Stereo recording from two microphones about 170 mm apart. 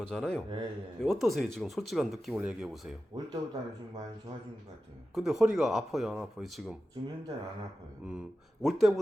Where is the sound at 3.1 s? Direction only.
25° right (ahead or behind).